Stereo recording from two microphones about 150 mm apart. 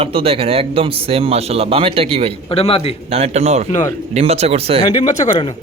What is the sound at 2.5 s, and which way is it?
Speech, 40° left (ahead or behind).